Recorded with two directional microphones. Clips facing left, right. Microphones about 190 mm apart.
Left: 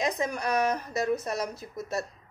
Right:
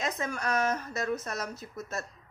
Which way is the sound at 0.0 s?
15° left (ahead or behind).